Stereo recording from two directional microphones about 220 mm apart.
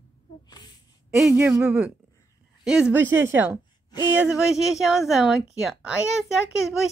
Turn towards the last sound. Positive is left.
turn(degrees=0)  # may be behind; listen again after turning